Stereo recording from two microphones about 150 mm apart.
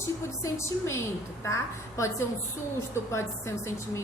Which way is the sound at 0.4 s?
20° left (ahead or behind).